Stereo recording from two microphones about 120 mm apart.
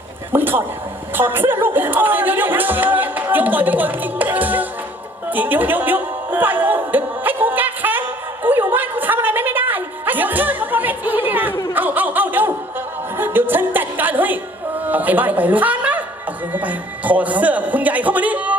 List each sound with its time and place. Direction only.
0.3 s speech: 15° right (ahead or behind)
5.3 s music: 15° right (ahead or behind)
8.4 s a sound: 15° right (ahead or behind)
11.7 s snicker: 15° right (ahead or behind)
13.1 s a man's voice: 15° right (ahead or behind)